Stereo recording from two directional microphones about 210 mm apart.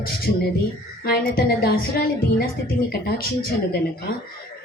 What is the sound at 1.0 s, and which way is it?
A woman's voice, 45° left (ahead or behind).